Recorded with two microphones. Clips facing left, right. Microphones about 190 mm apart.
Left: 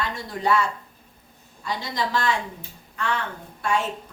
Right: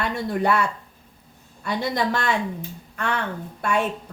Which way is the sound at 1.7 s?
60° right (ahead or behind).